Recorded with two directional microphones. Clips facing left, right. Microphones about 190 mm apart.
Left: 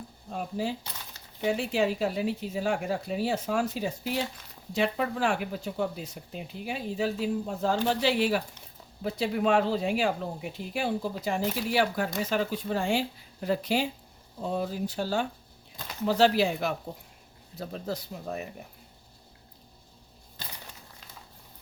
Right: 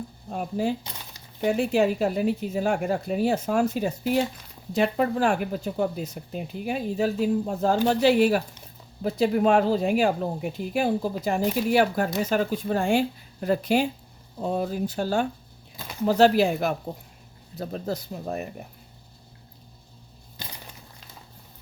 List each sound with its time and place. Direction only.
0.3 s speech: 50° right (ahead or behind)